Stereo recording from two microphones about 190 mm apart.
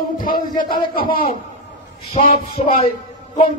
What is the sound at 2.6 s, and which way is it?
Speech, 30° left (ahead or behind).